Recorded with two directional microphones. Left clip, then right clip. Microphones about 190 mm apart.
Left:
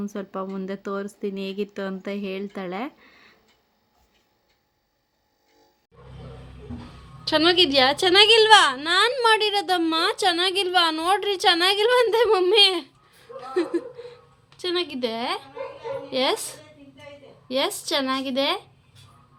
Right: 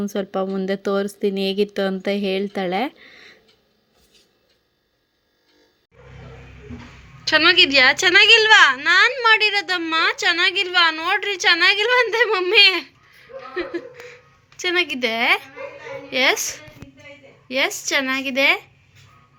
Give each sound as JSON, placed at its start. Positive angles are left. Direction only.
{"t": 0.0, "sound": "speech", "side_deg": -10}
{"t": 7.3, "sound": "speech", "side_deg": 20}
{"t": 13.1, "sound": "chuckle", "side_deg": 30}
{"t": 13.9, "sound": "a sound", "side_deg": 0}
{"t": 14.6, "sound": "a woman's voice", "side_deg": -5}
{"t": 16.0, "sound": "a woman's voice", "side_deg": 10}